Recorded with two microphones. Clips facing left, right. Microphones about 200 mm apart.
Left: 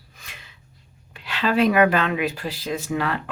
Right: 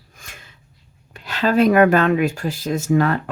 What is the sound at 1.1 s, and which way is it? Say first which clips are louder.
Speech: right 4 dB; 40° right (ahead or behind).